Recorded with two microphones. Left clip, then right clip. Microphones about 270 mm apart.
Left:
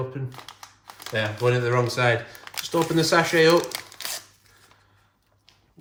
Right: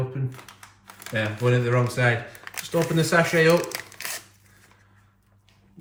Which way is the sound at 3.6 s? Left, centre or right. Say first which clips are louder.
Even; centre.